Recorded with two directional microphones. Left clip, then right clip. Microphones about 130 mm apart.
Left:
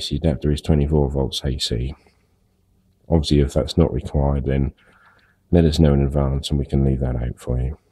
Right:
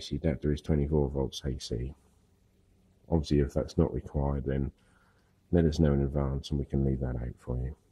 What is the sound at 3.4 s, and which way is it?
Speech, centre (ahead or behind).